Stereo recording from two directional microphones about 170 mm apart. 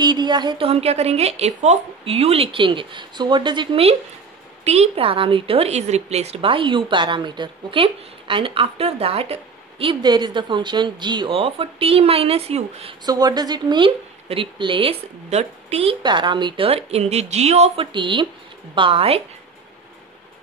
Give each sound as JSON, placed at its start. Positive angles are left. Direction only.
{"t": 0.0, "sound": "a woman's voice", "side_deg": -25}
{"t": 13.0, "sound": "a woman's voice", "side_deg": -25}